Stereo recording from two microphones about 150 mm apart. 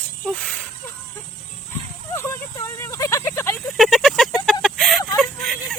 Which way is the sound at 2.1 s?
20° left (ahead or behind).